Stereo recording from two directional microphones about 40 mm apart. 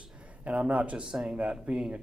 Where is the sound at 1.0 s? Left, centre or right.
Centre.